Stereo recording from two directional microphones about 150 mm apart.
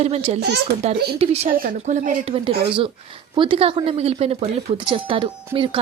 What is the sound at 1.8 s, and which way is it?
Speech, 55° right (ahead or behind).